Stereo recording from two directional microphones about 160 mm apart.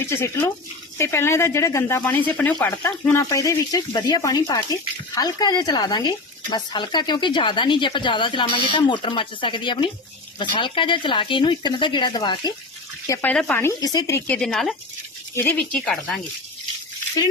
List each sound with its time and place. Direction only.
0.0 s speech: 15° left (ahead or behind)
13.3 s speech: 5° left (ahead or behind)
13.6 s speech: 20° left (ahead or behind); by 16.2 s centre (ahead or behind)